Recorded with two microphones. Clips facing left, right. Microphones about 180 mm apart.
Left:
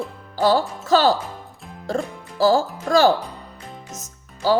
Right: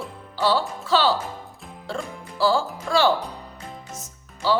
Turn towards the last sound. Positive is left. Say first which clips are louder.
# left 3 dB
turn(degrees=40)  # may be behind; listen again after turning